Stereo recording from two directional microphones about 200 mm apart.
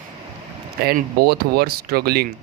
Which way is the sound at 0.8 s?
50° right (ahead or behind).